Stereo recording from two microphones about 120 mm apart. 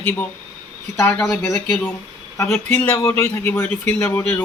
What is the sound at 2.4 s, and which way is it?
Speech, 20° left (ahead or behind).